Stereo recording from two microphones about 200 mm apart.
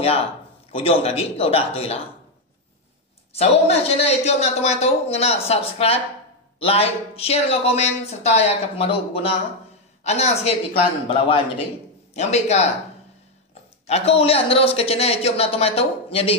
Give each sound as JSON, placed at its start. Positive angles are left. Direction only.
{"t": 0.7, "sound": "speech", "side_deg": 30}
{"t": 3.3, "sound": "a man's voice", "side_deg": 30}
{"t": 13.8, "sound": "speech", "side_deg": 30}